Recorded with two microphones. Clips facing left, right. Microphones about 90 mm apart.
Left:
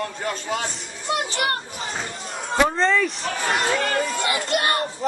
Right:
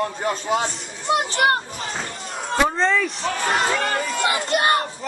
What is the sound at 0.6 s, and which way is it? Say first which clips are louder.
A child's voice: right 4 dB; centre (ahead or behind).